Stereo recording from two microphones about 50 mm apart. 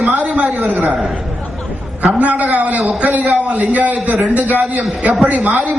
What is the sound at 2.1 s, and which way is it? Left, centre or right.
A man's voice, right.